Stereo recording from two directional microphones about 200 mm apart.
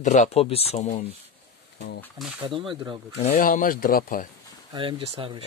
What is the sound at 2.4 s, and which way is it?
Speech, 25° right (ahead or behind).